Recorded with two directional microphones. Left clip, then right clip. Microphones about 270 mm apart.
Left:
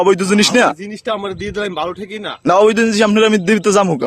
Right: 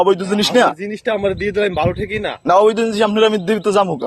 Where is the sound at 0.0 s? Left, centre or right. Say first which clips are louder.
Left 2 dB; left.